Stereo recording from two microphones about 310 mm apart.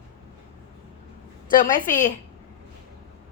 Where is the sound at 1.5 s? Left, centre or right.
Left.